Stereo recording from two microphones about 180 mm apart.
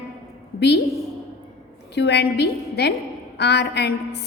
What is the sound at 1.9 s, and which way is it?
A woman's voice, 70° left (ahead or behind).